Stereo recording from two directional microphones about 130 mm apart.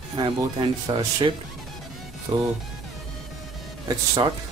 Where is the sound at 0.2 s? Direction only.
35° right (ahead or behind).